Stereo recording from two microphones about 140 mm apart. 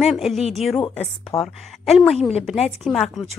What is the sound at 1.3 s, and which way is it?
Speech, 25° left (ahead or behind).